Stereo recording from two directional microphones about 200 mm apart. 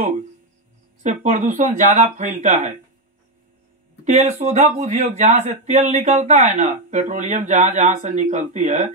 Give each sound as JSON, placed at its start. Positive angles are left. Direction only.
{"t": 1.0, "sound": "speech", "side_deg": -40}
{"t": 4.0, "sound": "speech", "side_deg": -35}